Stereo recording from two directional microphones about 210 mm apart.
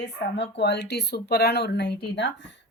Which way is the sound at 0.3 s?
55° left (ahead or behind).